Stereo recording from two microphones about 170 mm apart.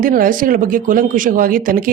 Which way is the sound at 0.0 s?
55° right (ahead or behind).